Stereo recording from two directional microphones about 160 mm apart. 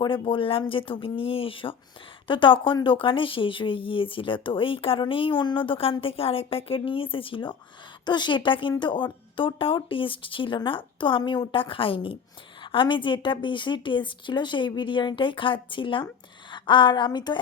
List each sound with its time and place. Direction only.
0.0 s a woman's voice: 30° left (ahead or behind)